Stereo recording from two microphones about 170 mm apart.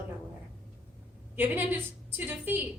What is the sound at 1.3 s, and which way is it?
Speech, 10° right (ahead or behind).